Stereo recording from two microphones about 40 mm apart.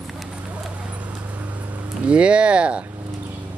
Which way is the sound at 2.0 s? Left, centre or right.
Right.